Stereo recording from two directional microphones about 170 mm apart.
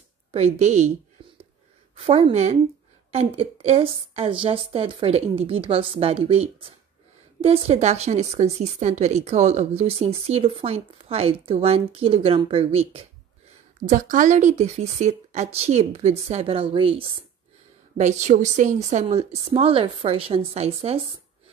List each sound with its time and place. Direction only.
0.6 s speech: 40° right (ahead or behind)
2.0 s speech: 35° right (ahead or behind)
13.8 s speech: 50° right (ahead or behind); by 17.2 s 35° right (ahead or behind)
17.9 s speech: 45° right (ahead or behind)